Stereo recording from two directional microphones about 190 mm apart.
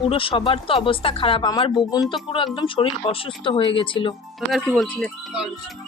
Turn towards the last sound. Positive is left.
turn(degrees=0)  # may be behind; listen again after turning